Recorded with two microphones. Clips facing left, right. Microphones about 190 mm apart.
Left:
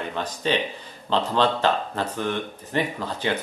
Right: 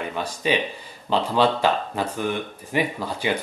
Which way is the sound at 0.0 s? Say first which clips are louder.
Right 1 dB; 10° right (ahead or behind).